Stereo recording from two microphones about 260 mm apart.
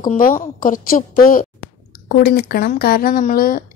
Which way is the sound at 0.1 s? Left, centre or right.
Left.